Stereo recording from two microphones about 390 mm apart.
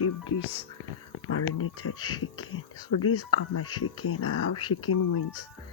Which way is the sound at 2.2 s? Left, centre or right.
Left.